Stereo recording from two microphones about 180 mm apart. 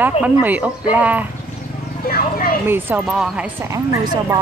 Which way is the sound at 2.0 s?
55° left (ahead or behind).